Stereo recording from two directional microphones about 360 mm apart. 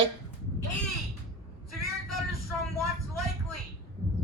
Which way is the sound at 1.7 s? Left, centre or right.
Centre.